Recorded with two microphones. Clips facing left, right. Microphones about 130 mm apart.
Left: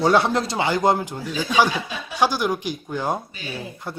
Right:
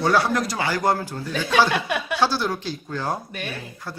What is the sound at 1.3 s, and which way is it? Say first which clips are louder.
Speech: even; 60° right (ahead or behind).